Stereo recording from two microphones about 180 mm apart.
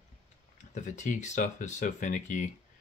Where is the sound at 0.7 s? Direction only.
45° left (ahead or behind).